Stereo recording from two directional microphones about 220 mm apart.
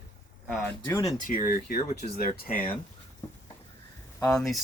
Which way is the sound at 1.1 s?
35° left (ahead or behind).